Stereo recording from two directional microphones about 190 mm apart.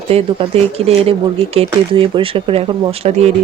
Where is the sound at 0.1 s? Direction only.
30° right (ahead or behind).